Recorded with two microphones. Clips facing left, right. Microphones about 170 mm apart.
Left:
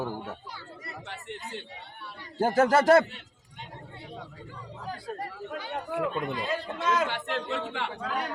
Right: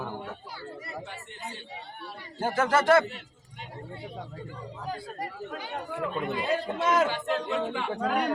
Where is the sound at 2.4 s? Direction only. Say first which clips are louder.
Left 3 dB; 40° left (ahead or behind).